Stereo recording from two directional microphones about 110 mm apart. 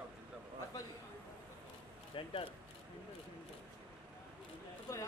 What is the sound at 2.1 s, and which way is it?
Speech, 55° left (ahead or behind).